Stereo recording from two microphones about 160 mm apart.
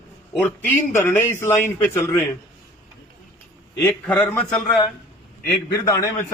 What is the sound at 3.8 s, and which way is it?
Speech, 10° left (ahead or behind).